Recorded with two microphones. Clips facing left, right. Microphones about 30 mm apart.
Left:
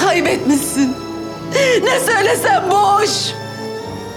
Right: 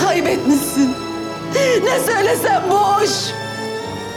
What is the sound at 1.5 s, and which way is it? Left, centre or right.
A woman's voice, centre.